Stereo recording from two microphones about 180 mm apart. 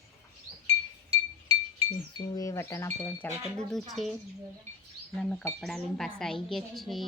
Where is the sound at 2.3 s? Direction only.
15° left (ahead or behind).